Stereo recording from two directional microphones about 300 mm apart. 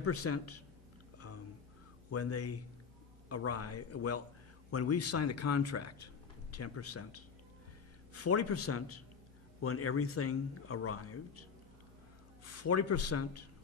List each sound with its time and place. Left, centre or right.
0.0 s speech: left
2.0 s a man's voice: left
12.4 s a man's voice: left